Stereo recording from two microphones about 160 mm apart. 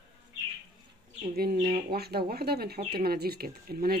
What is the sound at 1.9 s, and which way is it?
Speech, 75° right (ahead or behind).